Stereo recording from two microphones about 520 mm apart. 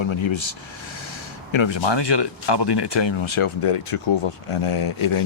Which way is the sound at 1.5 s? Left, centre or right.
Left.